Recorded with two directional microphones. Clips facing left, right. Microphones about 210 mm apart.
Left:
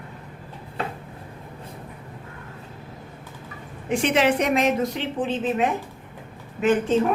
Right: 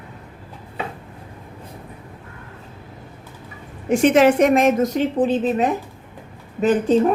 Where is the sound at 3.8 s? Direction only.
45° right (ahead or behind).